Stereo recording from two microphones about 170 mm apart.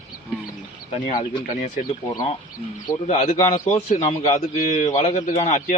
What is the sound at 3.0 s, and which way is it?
Speech, 35° left (ahead or behind).